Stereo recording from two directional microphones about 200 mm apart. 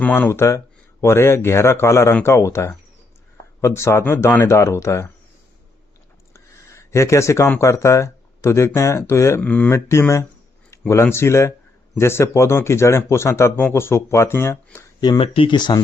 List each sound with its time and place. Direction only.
0.0 s speech: 10° left (ahead or behind)
6.3 s speech: 15° left (ahead or behind)
15.2 s speech: 25° left (ahead or behind)